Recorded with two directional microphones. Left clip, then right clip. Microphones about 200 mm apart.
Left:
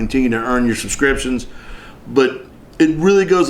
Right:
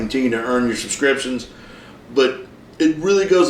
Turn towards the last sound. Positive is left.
turn(degrees=40)  # may be behind; listen again after turning